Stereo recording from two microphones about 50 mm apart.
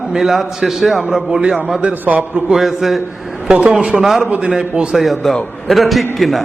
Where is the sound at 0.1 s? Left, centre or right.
Centre.